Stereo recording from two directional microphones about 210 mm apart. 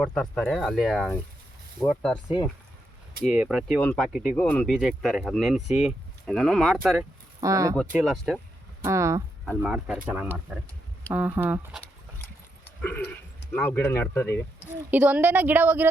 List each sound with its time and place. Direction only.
0.0 s speech: centre (ahead or behind)
7.4 s a woman's voice: 15° right (ahead or behind)
7.9 s speech: centre (ahead or behind)
8.8 s a woman's voice: 15° right (ahead or behind)
13.5 s speech: 10° left (ahead or behind)
14.8 s a woman's voice: 10° right (ahead or behind)